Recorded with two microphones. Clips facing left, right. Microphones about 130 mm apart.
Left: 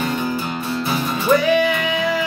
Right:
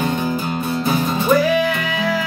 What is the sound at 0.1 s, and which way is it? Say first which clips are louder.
Music: right 2 dB; 25° right (ahead or behind).